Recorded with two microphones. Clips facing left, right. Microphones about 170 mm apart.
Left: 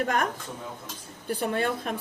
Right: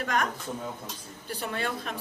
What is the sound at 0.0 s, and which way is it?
Speech, 50° left (ahead or behind).